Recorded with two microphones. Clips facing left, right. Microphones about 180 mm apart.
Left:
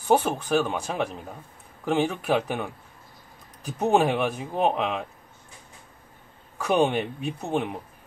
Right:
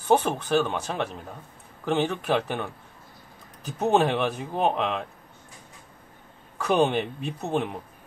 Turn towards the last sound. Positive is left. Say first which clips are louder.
# even
turn(degrees=5)  # may be behind; listen again after turning